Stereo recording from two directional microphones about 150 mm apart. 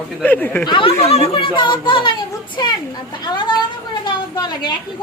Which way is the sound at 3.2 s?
30° left (ahead or behind).